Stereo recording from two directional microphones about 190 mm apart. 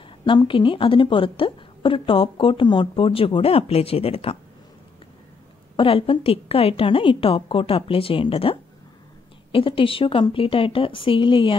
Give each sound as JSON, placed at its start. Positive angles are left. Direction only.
{"t": 0.2, "sound": "a woman's voice", "side_deg": 25}
{"t": 5.8, "sound": "a woman's voice", "side_deg": 30}